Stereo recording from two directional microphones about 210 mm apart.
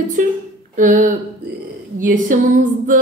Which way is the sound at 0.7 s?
40° right (ahead or behind).